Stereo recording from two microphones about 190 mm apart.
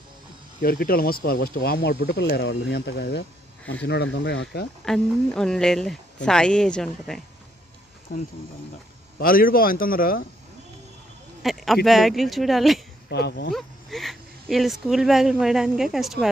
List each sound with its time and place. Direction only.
0.6 s speech: 50° left (ahead or behind)
4.8 s speech: 5° left (ahead or behind)
9.2 s speech: 50° left (ahead or behind)
11.4 s speech: centre (ahead or behind)
13.1 s speech: 60° left (ahead or behind)
13.5 s speech: centre (ahead or behind)